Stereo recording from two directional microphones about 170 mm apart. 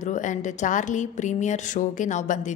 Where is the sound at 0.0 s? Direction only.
45° left (ahead or behind).